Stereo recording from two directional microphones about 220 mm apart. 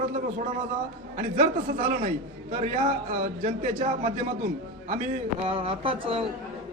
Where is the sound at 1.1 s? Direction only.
35° right (ahead or behind).